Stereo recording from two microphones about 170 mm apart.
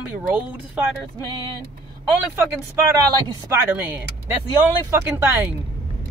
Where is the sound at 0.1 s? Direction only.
10° right (ahead or behind).